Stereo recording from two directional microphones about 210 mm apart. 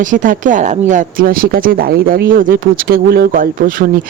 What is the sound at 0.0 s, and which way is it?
Speech, 40° right (ahead or behind).